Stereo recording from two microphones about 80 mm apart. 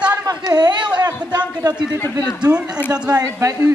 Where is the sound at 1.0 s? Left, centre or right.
Right.